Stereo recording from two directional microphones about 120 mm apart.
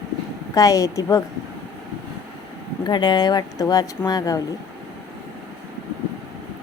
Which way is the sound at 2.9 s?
40° left (ahead or behind).